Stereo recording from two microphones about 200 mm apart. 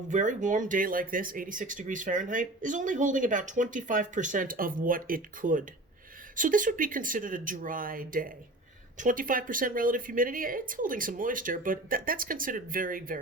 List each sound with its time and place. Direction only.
0.1 s speech: 40° right (ahead or behind)